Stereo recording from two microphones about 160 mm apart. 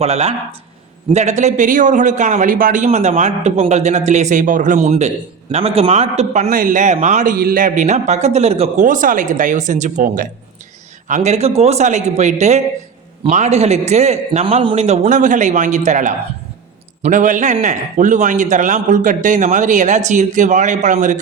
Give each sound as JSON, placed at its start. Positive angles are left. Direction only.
{"t": 0.0, "sound": "a man's voice", "side_deg": -40}
{"t": 6.5, "sound": "a man's voice", "side_deg": -60}